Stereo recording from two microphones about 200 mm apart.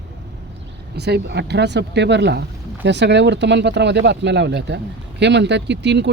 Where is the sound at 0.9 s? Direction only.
55° right (ahead or behind).